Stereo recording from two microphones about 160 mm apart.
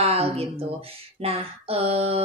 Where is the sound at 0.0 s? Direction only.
40° right (ahead or behind).